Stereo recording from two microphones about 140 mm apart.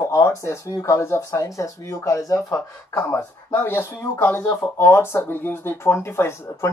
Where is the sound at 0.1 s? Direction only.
20° left (ahead or behind).